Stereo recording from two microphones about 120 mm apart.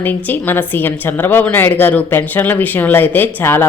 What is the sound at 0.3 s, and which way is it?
A woman's voice, 15° left (ahead or behind).